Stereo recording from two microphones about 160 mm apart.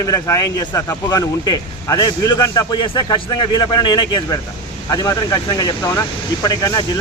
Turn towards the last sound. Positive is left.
turn(degrees=25)  # may be behind; listen again after turning